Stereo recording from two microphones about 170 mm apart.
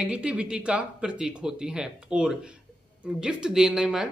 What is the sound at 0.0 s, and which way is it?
Speech, 5° right (ahead or behind).